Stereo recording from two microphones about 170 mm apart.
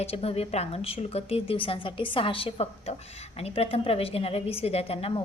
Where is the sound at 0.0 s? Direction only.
35° left (ahead or behind).